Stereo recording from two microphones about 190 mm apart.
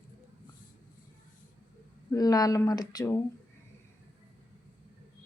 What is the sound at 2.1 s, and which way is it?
Speech, 20° left (ahead or behind).